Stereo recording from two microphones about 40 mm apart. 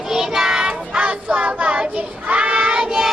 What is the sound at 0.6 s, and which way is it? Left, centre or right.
Child singing, right.